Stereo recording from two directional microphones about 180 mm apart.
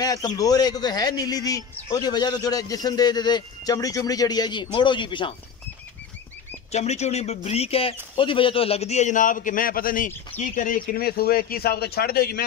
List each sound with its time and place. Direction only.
0.0 s a man's voice: 20° left (ahead or behind)
6.7 s speech: 35° left (ahead or behind); by 12.4 s 60° left (ahead or behind)